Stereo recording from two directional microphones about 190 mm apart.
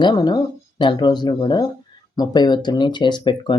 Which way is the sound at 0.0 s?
20° left (ahead or behind).